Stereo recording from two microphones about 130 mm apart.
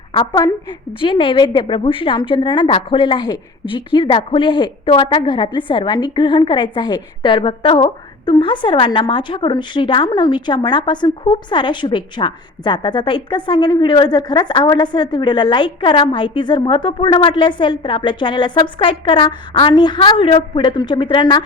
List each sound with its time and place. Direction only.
0.3 s a woman's voice: 35° left (ahead or behind)